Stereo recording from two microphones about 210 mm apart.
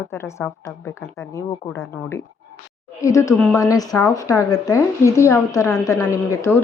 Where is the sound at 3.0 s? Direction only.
15° left (ahead or behind).